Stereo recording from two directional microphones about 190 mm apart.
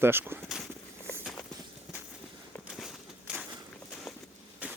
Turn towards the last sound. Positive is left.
turn(degrees=-5)  # may be behind; listen again after turning